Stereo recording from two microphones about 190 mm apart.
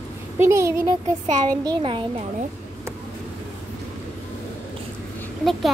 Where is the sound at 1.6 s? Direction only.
25° right (ahead or behind).